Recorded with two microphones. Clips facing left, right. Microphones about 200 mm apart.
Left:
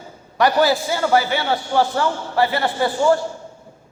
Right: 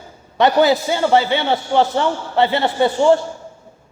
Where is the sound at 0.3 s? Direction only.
20° right (ahead or behind).